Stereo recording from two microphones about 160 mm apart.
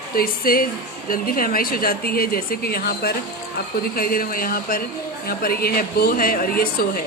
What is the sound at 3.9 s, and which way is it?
A woman's voice, 65° left (ahead or behind).